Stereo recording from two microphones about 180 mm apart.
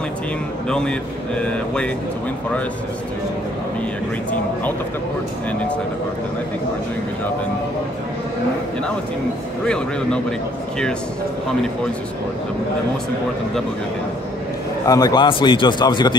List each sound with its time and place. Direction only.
0.7 s a man's voice: 5° left (ahead or behind)
14.9 s a man's voice: 20° left (ahead or behind)